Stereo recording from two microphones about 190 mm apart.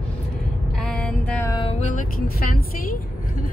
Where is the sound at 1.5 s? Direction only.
25° left (ahead or behind).